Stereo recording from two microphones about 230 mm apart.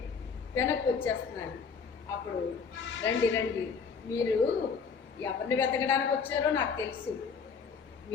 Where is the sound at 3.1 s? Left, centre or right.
Left.